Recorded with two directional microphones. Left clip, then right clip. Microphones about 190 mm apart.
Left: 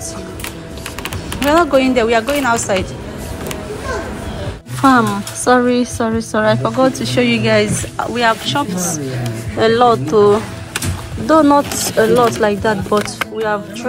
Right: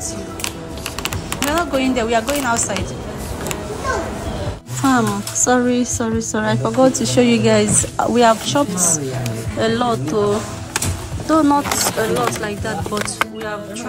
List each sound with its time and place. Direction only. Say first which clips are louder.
1.4 s a woman's voice: left 7 dB; 5° right (ahead or behind)
4.8 s a woman's voice: left 5 dB; 10° right (ahead or behind)
9.6 s a woman's voice: left 7 dB; 10° right (ahead or behind)